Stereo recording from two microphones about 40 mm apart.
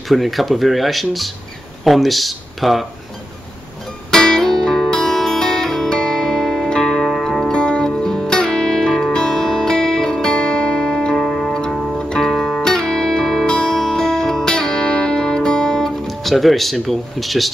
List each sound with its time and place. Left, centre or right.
0.1 s speech: centre
4.1 s music: centre
7.5 s music: left
7.9 s music: centre
11.2 s music: centre
13.5 s music: centre
16.1 s speech: centre